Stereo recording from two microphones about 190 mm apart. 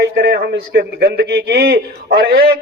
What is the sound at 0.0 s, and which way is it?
A man's voice, 55° right (ahead or behind).